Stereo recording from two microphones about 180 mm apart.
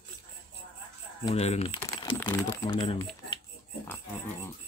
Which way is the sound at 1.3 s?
35° left (ahead or behind).